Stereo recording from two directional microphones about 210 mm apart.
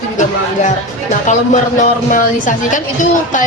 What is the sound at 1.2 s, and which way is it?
A woman's voice, 35° left (ahead or behind).